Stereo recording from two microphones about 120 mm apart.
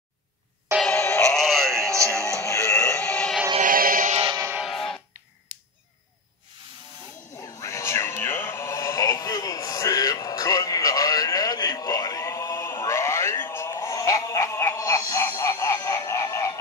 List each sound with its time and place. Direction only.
0.9 s synthetic singing: 20° left (ahead or behind)
1.2 s synthetic singing: 5° left (ahead or behind)
2.2 s music: 25° left (ahead or behind)
3.5 s music: 65° right (ahead or behind)
4.6 s music: 5° left (ahead or behind)
7.3 s a sound: 25° left (ahead or behind)